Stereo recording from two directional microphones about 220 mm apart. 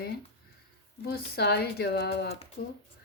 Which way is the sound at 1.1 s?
45° left (ahead or behind).